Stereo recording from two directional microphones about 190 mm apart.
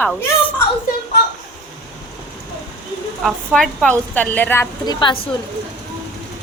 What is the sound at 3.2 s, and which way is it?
A woman's voice, centre (ahead or behind).